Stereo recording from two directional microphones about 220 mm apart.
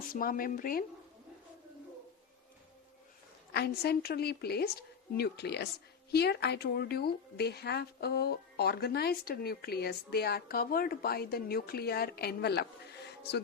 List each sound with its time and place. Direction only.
0.1 s speech: 40° left (ahead or behind)
3.5 s speech: 45° left (ahead or behind)